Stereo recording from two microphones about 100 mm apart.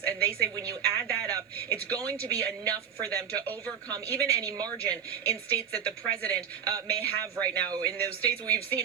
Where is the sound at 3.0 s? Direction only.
35° right (ahead or behind).